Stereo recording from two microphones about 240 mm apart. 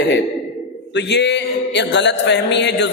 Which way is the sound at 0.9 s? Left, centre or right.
Left.